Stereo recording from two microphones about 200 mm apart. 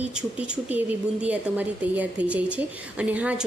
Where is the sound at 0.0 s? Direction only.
5° right (ahead or behind).